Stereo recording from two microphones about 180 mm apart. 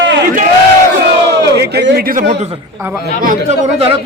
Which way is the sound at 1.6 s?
65° right (ahead or behind).